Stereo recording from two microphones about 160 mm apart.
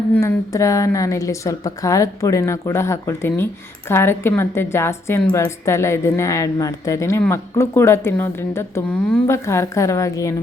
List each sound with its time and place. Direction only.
0.1 s a woman's voice: 15° left (ahead or behind)